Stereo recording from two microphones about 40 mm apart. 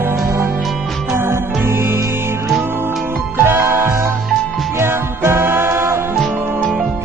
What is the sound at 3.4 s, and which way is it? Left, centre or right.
Music, right.